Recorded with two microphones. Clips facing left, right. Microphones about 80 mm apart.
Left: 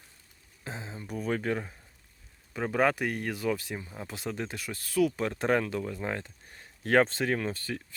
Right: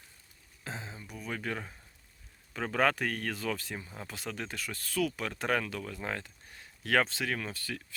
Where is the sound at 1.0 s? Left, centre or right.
Left.